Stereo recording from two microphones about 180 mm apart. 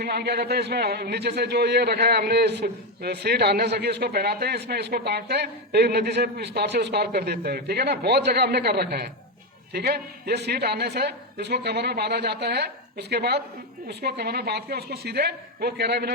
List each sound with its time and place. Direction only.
0.0 s a man's voice: 65° right (ahead or behind)